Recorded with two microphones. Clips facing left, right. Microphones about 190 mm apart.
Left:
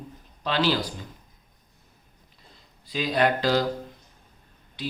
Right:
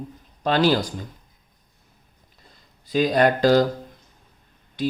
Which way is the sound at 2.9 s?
45° right (ahead or behind).